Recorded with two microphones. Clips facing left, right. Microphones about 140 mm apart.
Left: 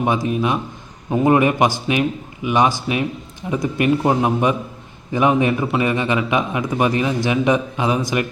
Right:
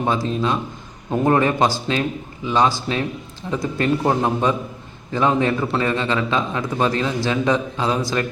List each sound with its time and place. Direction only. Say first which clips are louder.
0.0 s a man's voice: left 2 dB; 15° left (ahead or behind)